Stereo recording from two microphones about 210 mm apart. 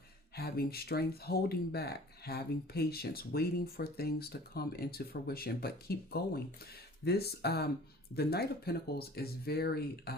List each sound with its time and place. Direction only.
0.3 s speech: 45° left (ahead or behind)